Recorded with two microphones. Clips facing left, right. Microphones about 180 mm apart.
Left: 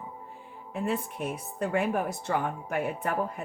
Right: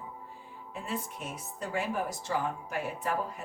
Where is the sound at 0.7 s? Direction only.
60° left (ahead or behind).